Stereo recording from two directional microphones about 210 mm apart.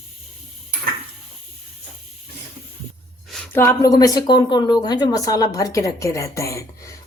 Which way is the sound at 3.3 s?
10° left (ahead or behind).